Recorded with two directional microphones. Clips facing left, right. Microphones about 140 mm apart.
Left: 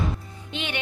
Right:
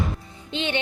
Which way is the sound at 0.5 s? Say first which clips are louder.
Right 5 dB; 30° right (ahead or behind).